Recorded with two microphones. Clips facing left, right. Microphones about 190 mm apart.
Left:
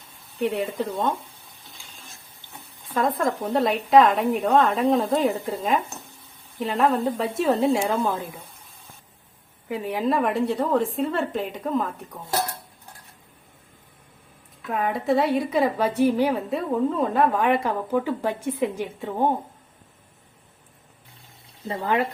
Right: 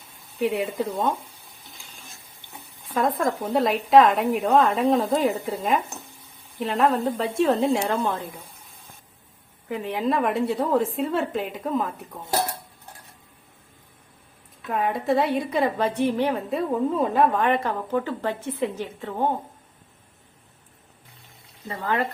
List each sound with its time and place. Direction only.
0.3 s a woman's voice: 5° right (ahead or behind)
2.9 s a woman's voice: 5° right (ahead or behind)
9.6 s a woman's voice: 10° left (ahead or behind)
14.7 s a woman's voice: centre (ahead or behind)
21.7 s a woman's voice: 15° left (ahead or behind)